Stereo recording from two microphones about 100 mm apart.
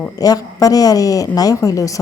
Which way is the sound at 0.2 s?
35° left (ahead or behind).